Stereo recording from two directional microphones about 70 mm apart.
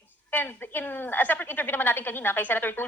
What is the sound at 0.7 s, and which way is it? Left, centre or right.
Speech, left.